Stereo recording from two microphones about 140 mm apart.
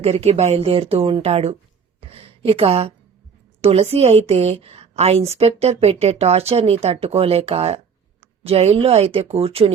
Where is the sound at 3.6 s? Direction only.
50° right (ahead or behind).